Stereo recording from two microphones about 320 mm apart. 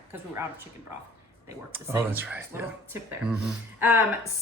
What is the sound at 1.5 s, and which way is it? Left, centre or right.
Speech, centre.